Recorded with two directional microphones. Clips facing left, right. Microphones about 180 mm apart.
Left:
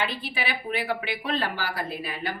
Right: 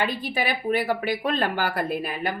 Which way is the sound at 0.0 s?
45° right (ahead or behind).